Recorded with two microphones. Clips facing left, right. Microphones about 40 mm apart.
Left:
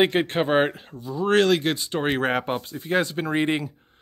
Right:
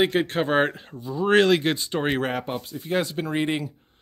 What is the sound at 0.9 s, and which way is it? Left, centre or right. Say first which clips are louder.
Speech: right 1 dB; centre.